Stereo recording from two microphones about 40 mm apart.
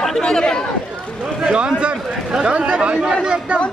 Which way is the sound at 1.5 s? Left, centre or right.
Right.